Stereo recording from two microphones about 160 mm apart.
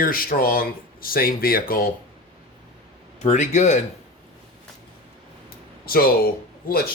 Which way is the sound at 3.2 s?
45° left (ahead or behind).